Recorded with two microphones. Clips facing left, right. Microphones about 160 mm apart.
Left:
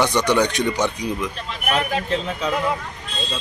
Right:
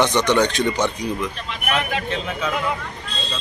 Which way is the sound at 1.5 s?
35° left (ahead or behind).